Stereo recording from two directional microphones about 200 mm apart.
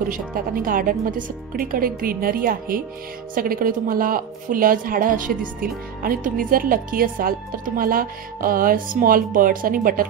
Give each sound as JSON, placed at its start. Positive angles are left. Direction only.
{"t": 0.1, "sound": "speech", "side_deg": -45}